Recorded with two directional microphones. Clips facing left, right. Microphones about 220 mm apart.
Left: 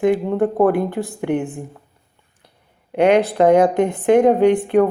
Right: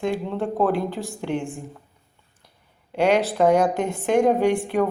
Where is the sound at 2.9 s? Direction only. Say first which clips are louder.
Left 5 dB; 55° left (ahead or behind).